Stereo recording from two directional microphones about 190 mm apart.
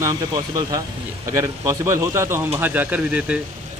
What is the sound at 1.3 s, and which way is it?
A man's voice, 15° right (ahead or behind).